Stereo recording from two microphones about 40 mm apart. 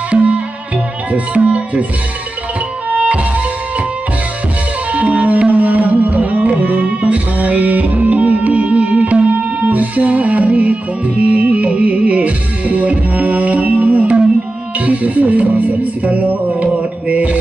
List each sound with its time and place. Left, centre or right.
0.1 s music: right
2.9 s music: right
4.9 s music: right